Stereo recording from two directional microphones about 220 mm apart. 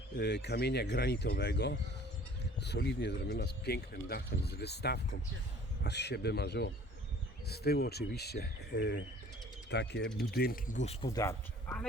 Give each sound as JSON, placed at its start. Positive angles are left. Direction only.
{"t": 0.2, "sound": "speech", "side_deg": 50}
{"t": 11.0, "sound": "speech", "side_deg": 15}